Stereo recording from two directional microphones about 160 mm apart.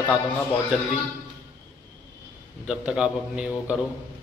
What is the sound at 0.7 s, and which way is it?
Speech, 5° right (ahead or behind).